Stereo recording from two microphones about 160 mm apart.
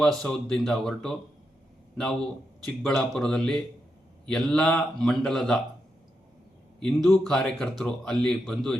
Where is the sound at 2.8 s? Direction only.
5° left (ahead or behind).